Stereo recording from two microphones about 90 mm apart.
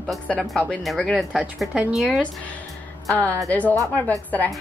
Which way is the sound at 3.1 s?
15° left (ahead or behind).